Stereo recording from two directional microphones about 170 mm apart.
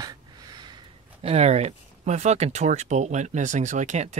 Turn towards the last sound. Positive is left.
turn(degrees=-45)  # may be behind; listen again after turning